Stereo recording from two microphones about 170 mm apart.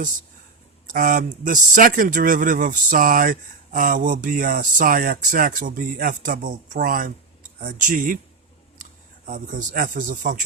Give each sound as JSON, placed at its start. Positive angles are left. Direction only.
{"t": 0.9, "sound": "speech", "side_deg": -55}